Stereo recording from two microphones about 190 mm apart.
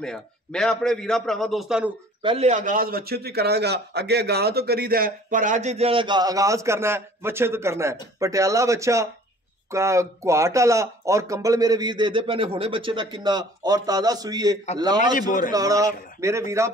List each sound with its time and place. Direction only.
0.0 s a man's voice: 5° left (ahead or behind)
2.2 s a man's voice: 35° right (ahead or behind)
15.1 s a man's voice: 45° left (ahead or behind)
15.5 s a man's voice: 20° right (ahead or behind)